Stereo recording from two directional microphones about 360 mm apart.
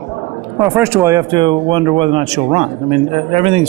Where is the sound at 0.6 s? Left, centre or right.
Centre.